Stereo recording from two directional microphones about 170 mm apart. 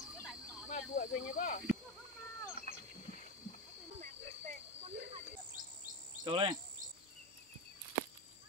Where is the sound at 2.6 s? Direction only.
50° left (ahead or behind).